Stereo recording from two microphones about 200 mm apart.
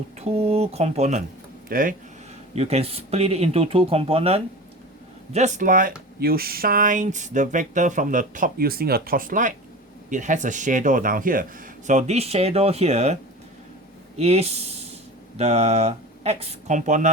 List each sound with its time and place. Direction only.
0.2 s speech: 30° right (ahead or behind)
2.6 s speech: 30° right (ahead or behind)
14.2 s speech: 30° right (ahead or behind)